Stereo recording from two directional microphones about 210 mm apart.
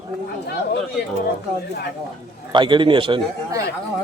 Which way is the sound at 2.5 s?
20° right (ahead or behind).